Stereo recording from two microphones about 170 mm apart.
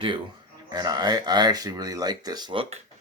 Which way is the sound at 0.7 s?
25° right (ahead or behind).